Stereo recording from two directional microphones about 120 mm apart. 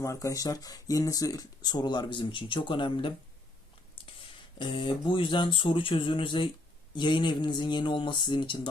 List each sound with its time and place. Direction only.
0.0 s speech: 25° left (ahead or behind); by 3.1 s 45° left (ahead or behind)
4.5 s speech: 45° left (ahead or behind)